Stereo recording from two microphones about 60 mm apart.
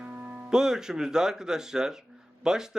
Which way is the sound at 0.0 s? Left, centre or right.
Right.